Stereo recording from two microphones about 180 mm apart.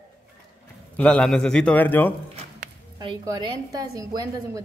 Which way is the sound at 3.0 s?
25° right (ahead or behind).